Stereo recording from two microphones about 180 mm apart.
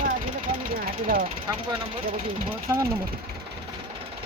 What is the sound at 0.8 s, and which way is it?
Vehicle, 55° right (ahead or behind).